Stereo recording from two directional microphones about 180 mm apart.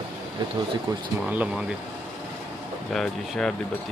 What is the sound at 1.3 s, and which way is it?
Speech, 5° right (ahead or behind).